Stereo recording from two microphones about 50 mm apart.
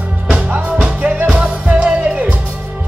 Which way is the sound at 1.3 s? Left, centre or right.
Right.